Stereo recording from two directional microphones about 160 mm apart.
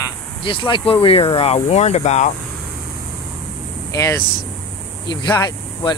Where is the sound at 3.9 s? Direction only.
20° left (ahead or behind).